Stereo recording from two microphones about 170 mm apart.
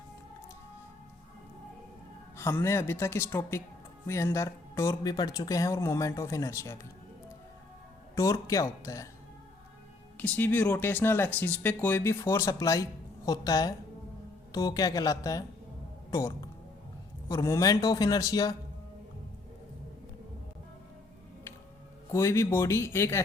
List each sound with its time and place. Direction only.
2.4 s speech: 15° left (ahead or behind)
8.1 s speech: 20° left (ahead or behind)
10.2 s speech: 10° left (ahead or behind)
17.2 s speech: 15° left (ahead or behind)
22.1 s speech: 15° left (ahead or behind)